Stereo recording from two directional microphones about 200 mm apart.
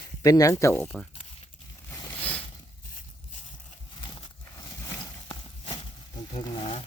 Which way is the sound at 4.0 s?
20° left (ahead or behind).